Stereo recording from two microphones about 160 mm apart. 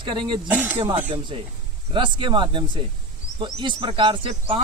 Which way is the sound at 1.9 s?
30° right (ahead or behind).